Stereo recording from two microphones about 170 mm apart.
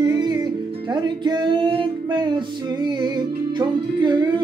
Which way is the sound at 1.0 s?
25° right (ahead or behind).